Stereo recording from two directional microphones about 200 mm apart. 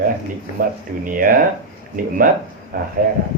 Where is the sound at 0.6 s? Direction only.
45° right (ahead or behind).